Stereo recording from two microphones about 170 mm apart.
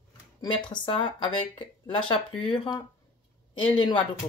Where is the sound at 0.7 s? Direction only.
30° left (ahead or behind).